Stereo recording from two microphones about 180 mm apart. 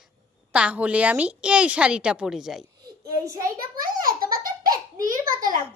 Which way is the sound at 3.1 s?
15° right (ahead or behind).